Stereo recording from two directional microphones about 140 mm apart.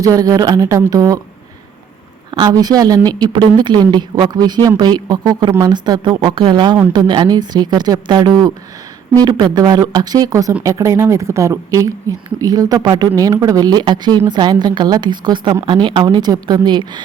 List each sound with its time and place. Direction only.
0.0 s speech: 25° right (ahead or behind)
2.3 s speech: 30° right (ahead or behind)